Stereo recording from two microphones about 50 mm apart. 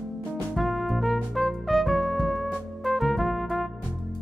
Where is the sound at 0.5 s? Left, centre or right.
Centre.